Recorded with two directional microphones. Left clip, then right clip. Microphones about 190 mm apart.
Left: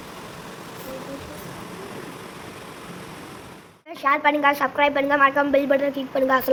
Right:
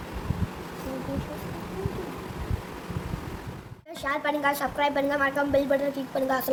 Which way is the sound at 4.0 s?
35° left (ahead or behind).